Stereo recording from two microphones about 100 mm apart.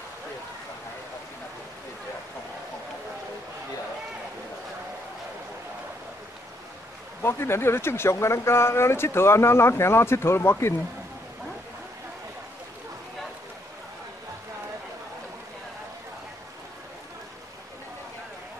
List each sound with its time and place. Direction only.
7.2 s speech: 25° left (ahead or behind)